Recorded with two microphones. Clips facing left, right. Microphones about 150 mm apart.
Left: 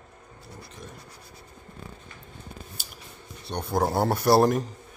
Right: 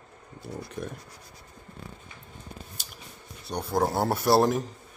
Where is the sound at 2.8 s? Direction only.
5° left (ahead or behind).